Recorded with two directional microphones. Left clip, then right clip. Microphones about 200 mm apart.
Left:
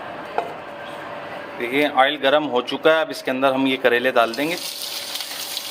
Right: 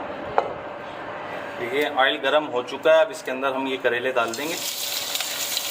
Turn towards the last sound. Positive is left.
turn(degrees=50)  # may be behind; listen again after turning